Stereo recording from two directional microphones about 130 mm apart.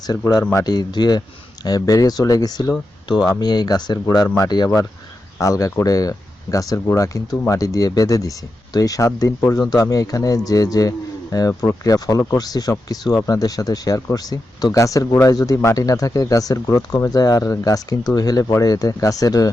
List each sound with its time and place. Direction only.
0.3 s speech: 30° left (ahead or behind)